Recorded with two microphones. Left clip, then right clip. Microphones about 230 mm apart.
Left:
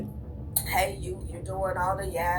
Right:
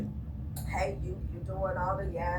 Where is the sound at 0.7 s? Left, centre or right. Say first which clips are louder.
Left 6 dB; left.